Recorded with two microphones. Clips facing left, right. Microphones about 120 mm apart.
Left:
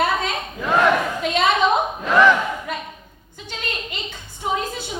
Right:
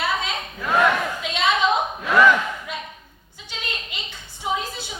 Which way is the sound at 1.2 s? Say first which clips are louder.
Left 3 dB; 50° left (ahead or behind).